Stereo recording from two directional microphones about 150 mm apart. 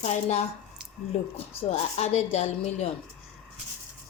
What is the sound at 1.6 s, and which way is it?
A woman's voice, 50° left (ahead or behind).